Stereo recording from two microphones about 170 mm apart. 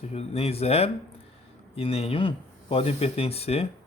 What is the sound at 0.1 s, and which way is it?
A man's voice, 40° left (ahead or behind).